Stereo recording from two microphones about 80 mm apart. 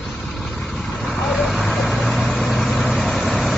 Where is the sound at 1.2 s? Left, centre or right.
Centre.